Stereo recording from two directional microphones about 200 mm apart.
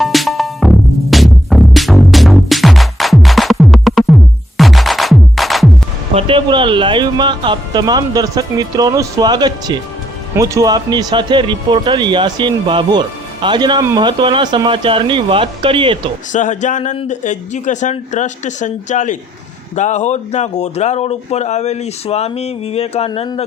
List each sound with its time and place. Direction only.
0.0 s music: centre (ahead or behind)
6.1 s speech: 25° right (ahead or behind)
16.3 s speech: 40° left (ahead or behind)